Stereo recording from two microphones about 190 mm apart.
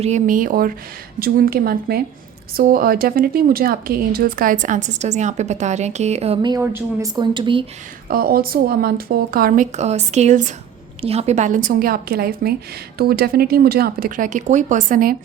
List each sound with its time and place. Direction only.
0.0 s speech: 40° right (ahead or behind)
6.6 s a woman's voice: 10° right (ahead or behind)
7.2 s speech: 25° right (ahead or behind)
8.0 s speech: 50° right (ahead or behind)